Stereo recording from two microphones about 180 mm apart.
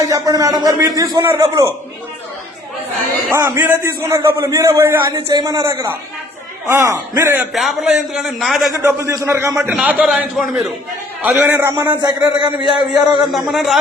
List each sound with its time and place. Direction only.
0.0 s a man's voice: 20° right (ahead or behind)
3.2 s a man's voice: 15° right (ahead or behind)
7.5 s a man's voice: centre (ahead or behind)
8.9 s a man's voice: 15° right (ahead or behind)
12.5 s a man's voice: 5° right (ahead or behind)